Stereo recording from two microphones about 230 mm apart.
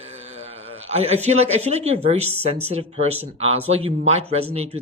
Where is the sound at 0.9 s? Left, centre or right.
Right.